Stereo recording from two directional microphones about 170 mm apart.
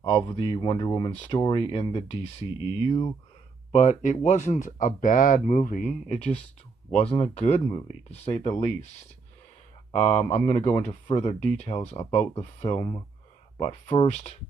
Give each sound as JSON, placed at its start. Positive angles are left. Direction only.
{"t": 0.0, "sound": "speech", "side_deg": 30}
{"t": 3.7, "sound": "speech", "side_deg": 45}